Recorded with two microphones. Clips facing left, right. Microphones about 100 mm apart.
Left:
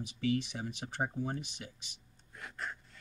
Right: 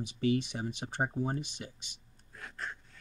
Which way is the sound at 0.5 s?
40° right (ahead or behind).